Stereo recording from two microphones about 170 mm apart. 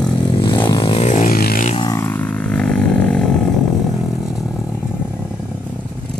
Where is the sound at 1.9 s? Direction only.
15° left (ahead or behind).